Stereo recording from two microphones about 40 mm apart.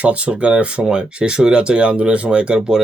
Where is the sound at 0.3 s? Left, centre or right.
Right.